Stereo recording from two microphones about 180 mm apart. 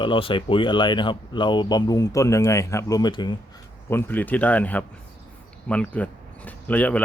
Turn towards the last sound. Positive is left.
turn(degrees=10)  # may be behind; listen again after turning